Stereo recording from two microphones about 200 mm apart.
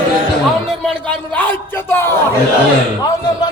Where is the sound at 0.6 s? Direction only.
5° left (ahead or behind).